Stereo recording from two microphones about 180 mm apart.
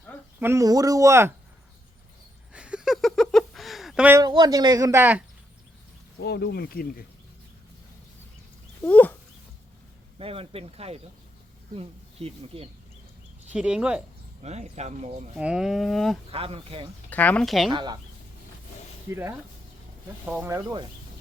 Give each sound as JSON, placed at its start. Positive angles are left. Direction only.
{"t": 0.3, "sound": "speech", "side_deg": -15}
{"t": 2.5, "sound": "a sound", "side_deg": -5}
{"t": 4.2, "sound": "speech", "side_deg": -20}
{"t": 6.1, "sound": "speech", "side_deg": 70}
{"t": 8.8, "sound": "dog", "side_deg": 10}
{"t": 10.2, "sound": "speech", "side_deg": -30}
{"t": 13.5, "sound": "speech", "side_deg": -5}
{"t": 14.4, "sound": "speech", "side_deg": -40}
{"t": 15.4, "sound": "speech", "side_deg": -5}
{"t": 16.3, "sound": "speech", "side_deg": -30}
{"t": 17.1, "sound": "speech", "side_deg": 10}
{"t": 17.7, "sound": "speech", "side_deg": -25}
{"t": 19.1, "sound": "speech", "side_deg": -15}